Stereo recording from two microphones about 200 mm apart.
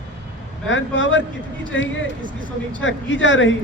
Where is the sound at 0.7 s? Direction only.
70° left (ahead or behind).